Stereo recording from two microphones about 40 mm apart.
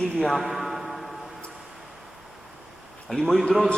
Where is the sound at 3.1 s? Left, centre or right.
Centre.